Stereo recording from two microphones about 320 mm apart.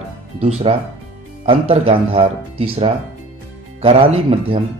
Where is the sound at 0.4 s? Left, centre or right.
Centre.